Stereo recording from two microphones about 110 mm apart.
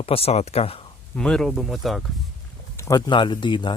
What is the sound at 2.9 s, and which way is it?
Speech, 45° left (ahead or behind).